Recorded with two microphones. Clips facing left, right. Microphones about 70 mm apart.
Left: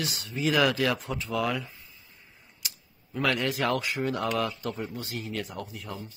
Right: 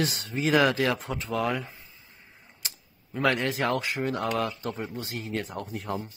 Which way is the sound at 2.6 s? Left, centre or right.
Right.